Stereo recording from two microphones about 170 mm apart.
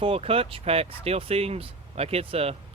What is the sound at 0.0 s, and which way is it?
Speech, 35° right (ahead or behind).